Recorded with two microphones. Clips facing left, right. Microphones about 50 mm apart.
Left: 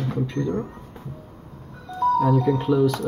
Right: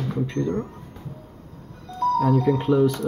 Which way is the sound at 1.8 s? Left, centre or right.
Centre.